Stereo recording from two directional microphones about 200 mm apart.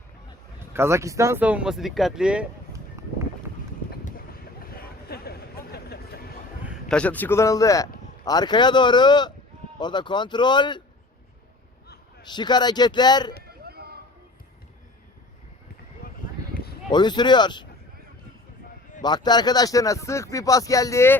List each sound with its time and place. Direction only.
0.7 s speech: 15° right (ahead or behind)
4.6 s vehicle: 50° left (ahead or behind)
6.8 s speech: 5° left (ahead or behind); by 10.8 s 20° left (ahead or behind)
12.3 s speech: 20° left (ahead or behind)
13.7 s a sound: 50° right (ahead or behind)
16.5 s a sound: 45° left (ahead or behind)
16.9 s speech: 20° left (ahead or behind)
19.0 s speech: 20° left (ahead or behind)